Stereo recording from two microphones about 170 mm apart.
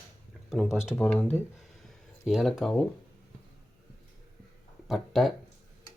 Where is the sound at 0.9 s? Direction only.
10° left (ahead or behind).